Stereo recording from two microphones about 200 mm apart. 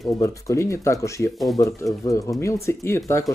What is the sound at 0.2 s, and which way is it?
Speech, 15° left (ahead or behind).